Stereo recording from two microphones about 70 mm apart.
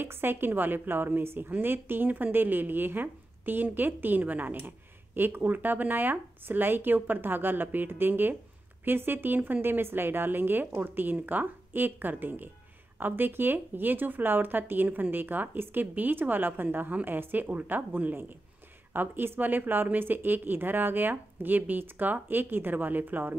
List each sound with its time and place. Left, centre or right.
0.0 s a woman's voice: right